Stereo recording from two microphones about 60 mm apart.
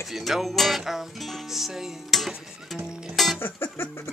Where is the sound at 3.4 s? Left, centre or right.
Left.